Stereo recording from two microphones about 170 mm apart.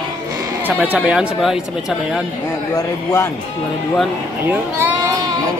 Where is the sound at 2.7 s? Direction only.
15° left (ahead or behind).